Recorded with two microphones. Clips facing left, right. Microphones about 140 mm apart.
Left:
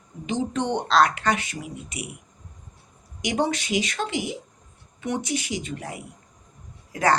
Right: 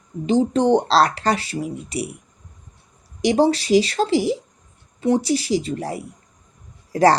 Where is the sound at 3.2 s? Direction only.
35° right (ahead or behind).